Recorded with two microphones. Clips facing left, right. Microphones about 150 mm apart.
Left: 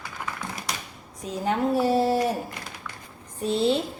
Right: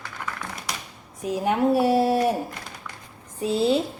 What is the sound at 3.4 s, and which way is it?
Speech, 5° right (ahead or behind).